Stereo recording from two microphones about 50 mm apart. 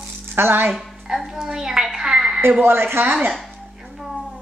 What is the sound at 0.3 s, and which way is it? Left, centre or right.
Speech, right.